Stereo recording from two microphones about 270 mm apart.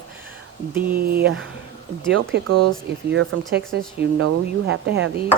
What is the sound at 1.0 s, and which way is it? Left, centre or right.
Speech, right.